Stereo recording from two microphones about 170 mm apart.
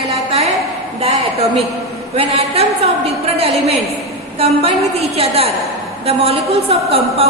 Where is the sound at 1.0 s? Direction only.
35° right (ahead or behind).